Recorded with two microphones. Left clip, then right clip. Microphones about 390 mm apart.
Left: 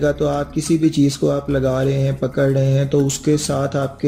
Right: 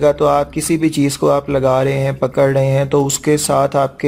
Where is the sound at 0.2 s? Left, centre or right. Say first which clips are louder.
Right 6 dB; centre.